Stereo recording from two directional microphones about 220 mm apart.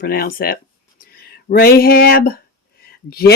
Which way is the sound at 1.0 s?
45° left (ahead or behind).